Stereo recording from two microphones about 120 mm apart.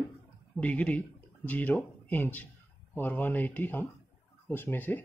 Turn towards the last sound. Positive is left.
turn(degrees=15)  # may be behind; listen again after turning